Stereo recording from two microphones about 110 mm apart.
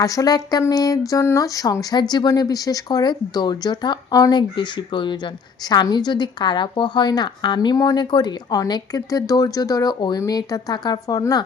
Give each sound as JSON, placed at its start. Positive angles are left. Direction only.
{"t": 0.0, "sound": "speech", "side_deg": 30}